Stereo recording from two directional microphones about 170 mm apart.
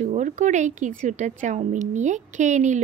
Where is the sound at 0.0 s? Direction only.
45° right (ahead or behind).